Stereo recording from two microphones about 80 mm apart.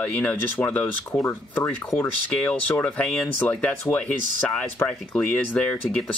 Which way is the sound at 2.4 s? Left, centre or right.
Centre.